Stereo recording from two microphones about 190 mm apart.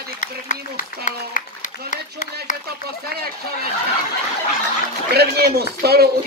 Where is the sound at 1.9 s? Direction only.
40° left (ahead or behind).